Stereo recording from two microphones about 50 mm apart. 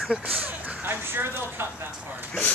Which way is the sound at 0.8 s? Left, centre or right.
Right.